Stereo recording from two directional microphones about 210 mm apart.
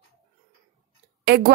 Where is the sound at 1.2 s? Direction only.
50° right (ahead or behind).